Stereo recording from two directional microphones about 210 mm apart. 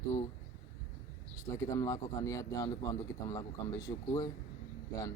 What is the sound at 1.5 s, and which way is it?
A man's voice, 15° left (ahead or behind).